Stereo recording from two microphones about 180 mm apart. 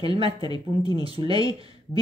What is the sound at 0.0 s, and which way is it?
Speech, 30° right (ahead or behind).